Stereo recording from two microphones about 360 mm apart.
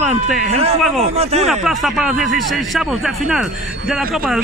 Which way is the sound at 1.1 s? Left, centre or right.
Centre.